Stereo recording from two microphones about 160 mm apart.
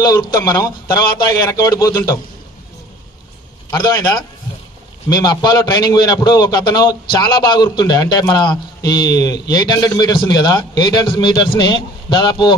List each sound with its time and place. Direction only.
0.0 s a man's voice: 20° left (ahead or behind)
3.7 s a man's voice: 25° left (ahead or behind)